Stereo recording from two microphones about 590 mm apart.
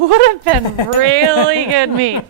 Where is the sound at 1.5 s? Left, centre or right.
Right.